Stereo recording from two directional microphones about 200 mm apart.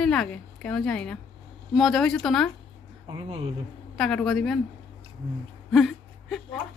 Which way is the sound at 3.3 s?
30° right (ahead or behind).